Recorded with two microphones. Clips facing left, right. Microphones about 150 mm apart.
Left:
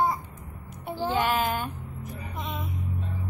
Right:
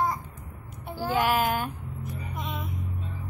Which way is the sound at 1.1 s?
5° right (ahead or behind).